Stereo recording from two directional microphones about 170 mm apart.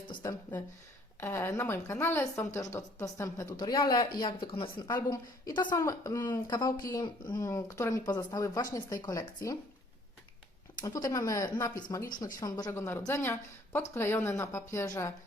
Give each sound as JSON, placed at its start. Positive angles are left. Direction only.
{"t": 0.1, "sound": "a sound", "side_deg": 20}
{"t": 1.2, "sound": "a woman's voice", "side_deg": 15}
{"t": 10.8, "sound": "a woman's voice", "side_deg": 20}